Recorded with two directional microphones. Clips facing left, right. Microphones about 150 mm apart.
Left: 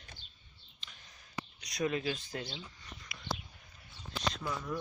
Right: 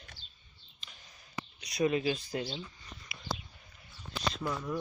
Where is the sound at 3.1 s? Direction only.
5° right (ahead or behind).